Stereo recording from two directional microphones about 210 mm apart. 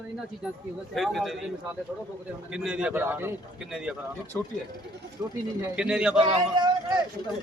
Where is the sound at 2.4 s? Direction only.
5° right (ahead or behind).